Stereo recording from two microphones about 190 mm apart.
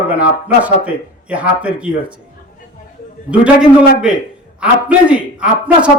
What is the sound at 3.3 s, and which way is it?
A man's voice, 5° right (ahead or behind).